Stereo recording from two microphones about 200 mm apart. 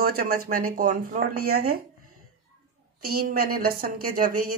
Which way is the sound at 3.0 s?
50° right (ahead or behind).